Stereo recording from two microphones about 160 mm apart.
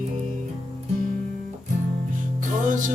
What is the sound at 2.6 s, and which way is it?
Music, 55° right (ahead or behind).